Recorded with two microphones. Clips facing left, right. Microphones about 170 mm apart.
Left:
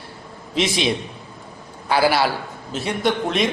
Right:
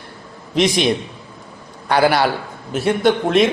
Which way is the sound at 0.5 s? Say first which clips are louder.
Right 5 dB; centre (ahead or behind).